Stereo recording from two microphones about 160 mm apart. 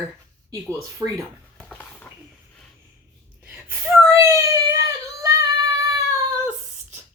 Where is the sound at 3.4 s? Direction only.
10° right (ahead or behind).